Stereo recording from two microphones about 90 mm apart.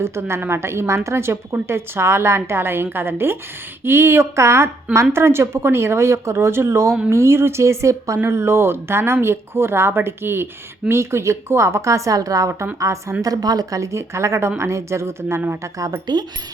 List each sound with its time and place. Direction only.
0.0 s a woman's voice: 30° right (ahead or behind)